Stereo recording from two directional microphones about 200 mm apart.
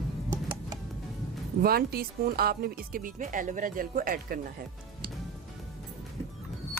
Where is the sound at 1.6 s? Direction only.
50° right (ahead or behind).